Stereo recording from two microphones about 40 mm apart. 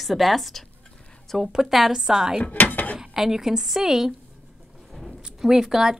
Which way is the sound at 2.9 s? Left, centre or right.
Centre.